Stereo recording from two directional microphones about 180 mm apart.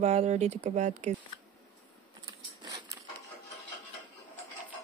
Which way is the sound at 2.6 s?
20° right (ahead or behind).